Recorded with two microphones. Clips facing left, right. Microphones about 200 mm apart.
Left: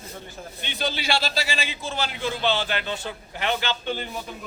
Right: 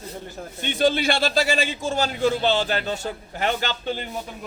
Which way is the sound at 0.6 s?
50° right (ahead or behind).